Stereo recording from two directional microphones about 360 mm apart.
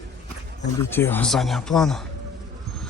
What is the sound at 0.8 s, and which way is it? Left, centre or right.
Speech, centre.